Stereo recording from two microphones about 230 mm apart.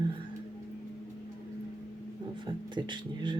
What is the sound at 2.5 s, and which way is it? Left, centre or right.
Speech, right.